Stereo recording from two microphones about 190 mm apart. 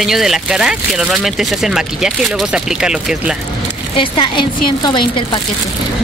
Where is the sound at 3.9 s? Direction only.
25° left (ahead or behind).